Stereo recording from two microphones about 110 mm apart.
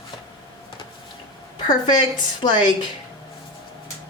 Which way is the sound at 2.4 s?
45° left (ahead or behind).